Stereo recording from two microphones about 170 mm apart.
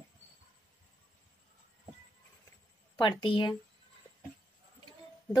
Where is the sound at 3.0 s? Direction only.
30° left (ahead or behind).